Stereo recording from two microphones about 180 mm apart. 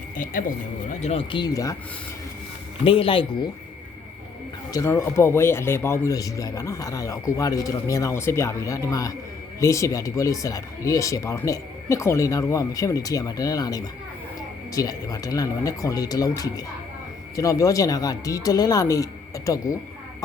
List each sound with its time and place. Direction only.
0.2 s speech: 50° left (ahead or behind); by 1.7 s 20° left (ahead or behind)
2.8 s speech: 30° left (ahead or behind)
4.7 s a man's voice: 15° left (ahead or behind)